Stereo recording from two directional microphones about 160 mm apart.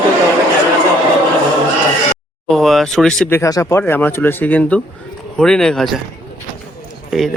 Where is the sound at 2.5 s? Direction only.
Centre (ahead or behind).